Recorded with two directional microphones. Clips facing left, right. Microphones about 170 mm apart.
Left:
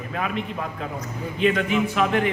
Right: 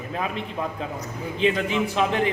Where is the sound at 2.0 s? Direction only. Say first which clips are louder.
Right 1 dB; 30° right (ahead or behind).